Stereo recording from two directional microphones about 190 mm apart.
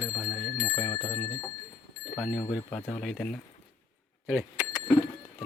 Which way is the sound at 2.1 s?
Centre (ahead or behind).